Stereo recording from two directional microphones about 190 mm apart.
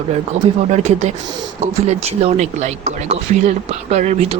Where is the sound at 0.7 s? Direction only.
35° right (ahead or behind).